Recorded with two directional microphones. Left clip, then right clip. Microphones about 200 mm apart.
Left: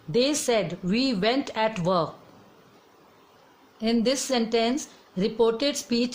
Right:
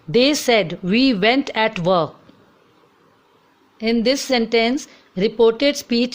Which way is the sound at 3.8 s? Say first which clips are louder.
Right 6 dB; 25° right (ahead or behind).